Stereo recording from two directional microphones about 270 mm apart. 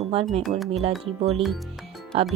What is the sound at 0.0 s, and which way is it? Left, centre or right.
Music, right.